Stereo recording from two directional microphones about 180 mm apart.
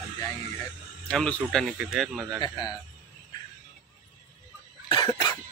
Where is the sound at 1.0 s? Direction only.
5° left (ahead or behind).